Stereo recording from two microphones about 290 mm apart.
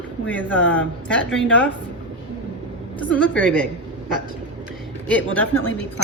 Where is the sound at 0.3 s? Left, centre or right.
Centre.